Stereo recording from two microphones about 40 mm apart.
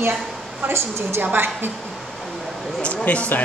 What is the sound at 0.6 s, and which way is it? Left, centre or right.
Speech, right.